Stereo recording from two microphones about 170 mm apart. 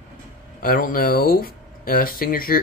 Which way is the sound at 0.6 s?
55° left (ahead or behind).